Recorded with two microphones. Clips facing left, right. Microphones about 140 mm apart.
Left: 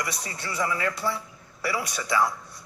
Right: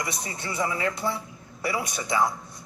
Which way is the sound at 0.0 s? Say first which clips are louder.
Right 1 dB; 20° right (ahead or behind).